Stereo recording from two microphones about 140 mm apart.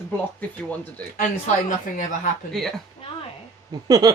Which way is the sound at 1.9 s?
75° left (ahead or behind).